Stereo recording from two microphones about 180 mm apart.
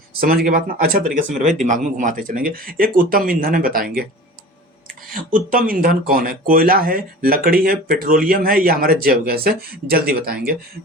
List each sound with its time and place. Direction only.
0.2 s speech: 55° right (ahead or behind)
5.1 s speech: 50° right (ahead or behind)